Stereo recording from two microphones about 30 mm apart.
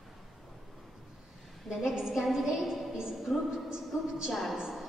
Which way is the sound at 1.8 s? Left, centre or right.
Centre.